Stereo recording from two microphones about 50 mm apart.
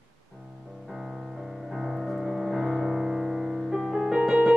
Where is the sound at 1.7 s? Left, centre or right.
Centre.